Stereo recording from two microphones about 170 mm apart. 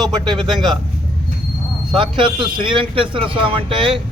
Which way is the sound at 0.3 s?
Centre (ahead or behind).